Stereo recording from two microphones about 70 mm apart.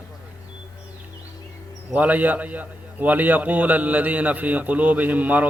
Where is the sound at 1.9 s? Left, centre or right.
Right.